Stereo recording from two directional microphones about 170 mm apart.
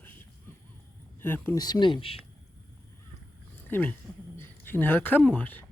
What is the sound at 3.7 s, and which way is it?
Speech, 10° left (ahead or behind).